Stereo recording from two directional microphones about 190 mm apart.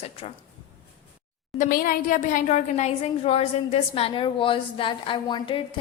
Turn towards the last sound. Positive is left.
turn(degrees=25)  # may be behind; listen again after turning